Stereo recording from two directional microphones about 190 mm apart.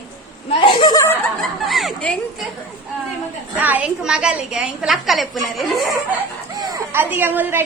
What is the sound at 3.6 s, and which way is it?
A woman's voice, 10° right (ahead or behind).